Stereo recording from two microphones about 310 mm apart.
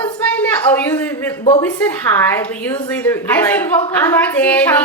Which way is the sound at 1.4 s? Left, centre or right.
Centre.